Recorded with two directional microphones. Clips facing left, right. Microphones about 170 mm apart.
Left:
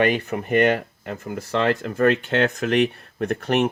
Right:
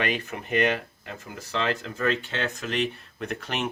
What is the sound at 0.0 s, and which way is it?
Speech, 50° left (ahead or behind).